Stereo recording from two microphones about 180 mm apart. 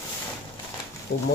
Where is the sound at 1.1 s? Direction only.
65° left (ahead or behind).